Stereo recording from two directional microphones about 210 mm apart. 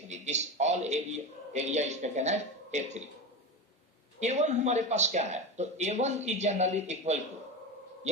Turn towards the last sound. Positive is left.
turn(degrees=-35)  # may be behind; listen again after turning